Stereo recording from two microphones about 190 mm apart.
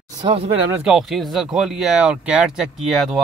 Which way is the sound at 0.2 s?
30° right (ahead or behind).